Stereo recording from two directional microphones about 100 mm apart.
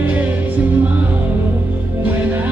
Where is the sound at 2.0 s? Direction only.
20° right (ahead or behind).